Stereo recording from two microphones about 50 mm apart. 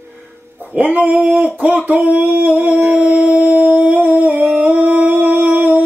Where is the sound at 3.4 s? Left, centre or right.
Right.